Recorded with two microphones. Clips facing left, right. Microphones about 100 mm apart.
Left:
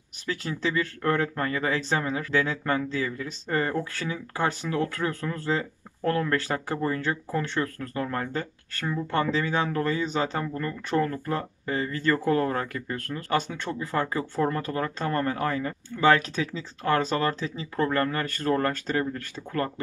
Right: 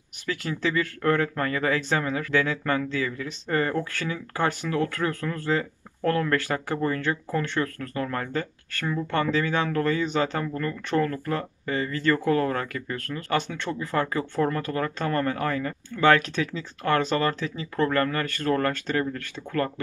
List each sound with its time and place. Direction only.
0.3 s speech: 30° left (ahead or behind)
10.0 s speech: 35° left (ahead or behind)
10.4 s speech: 25° left (ahead or behind)